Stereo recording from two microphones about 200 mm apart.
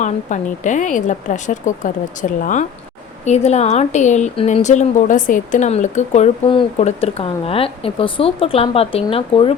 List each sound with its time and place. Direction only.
0.0 s a woman's voice: 40° left (ahead or behind)